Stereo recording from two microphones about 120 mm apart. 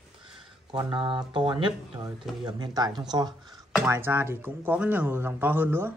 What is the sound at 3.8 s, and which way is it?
Speech, 20° right (ahead or behind).